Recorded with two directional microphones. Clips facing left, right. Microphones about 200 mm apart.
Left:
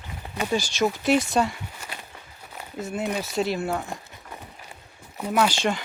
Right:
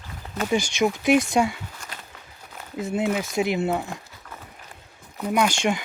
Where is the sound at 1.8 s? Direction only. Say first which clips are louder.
Left 3 dB; 10° left (ahead or behind).